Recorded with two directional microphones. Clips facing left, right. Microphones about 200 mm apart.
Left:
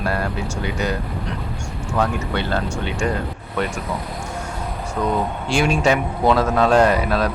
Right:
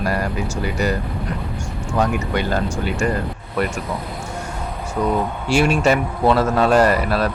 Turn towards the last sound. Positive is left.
turn(degrees=-5)  # may be behind; listen again after turning